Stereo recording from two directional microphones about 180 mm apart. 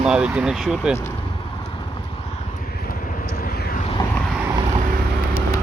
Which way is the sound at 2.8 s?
50° left (ahead or behind).